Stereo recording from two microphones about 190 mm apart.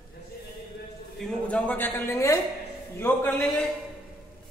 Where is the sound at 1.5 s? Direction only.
10° left (ahead or behind).